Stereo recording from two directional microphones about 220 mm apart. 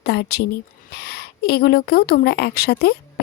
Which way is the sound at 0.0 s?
45° left (ahead or behind).